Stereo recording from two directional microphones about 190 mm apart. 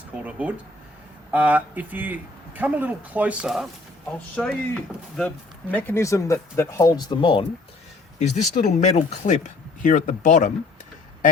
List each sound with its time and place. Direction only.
0.3 s speech: 5° right (ahead or behind); by 7.4 s 25° left (ahead or behind)
8.2 s speech: 35° left (ahead or behind)